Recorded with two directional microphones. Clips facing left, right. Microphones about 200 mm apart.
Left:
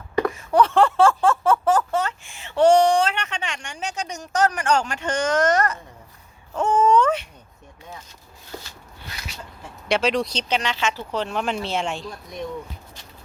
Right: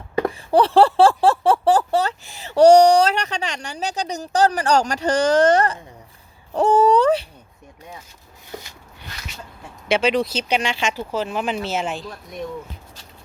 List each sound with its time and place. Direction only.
0.3 s speech: 35° right (ahead or behind)
9.9 s speech: centre (ahead or behind)